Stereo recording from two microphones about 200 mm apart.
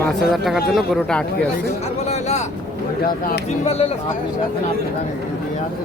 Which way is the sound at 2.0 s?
35° left (ahead or behind).